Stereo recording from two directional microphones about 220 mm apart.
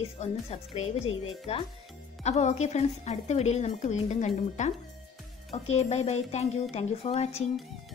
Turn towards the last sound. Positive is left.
turn(degrees=30)  # may be behind; listen again after turning